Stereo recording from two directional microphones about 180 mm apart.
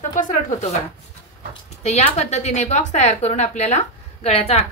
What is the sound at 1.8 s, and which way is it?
Speech, 35° left (ahead or behind).